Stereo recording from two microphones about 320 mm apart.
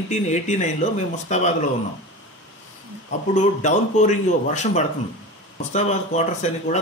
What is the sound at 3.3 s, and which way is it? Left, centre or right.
Speech, left.